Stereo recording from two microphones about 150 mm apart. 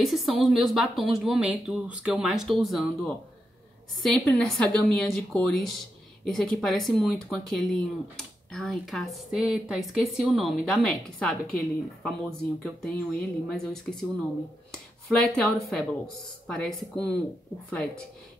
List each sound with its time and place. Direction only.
0.0 s a woman's voice: centre (ahead or behind)
15.0 s a woman's voice: 5° left (ahead or behind)